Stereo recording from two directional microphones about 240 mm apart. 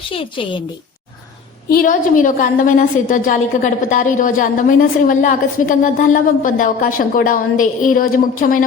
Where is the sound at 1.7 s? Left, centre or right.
Left.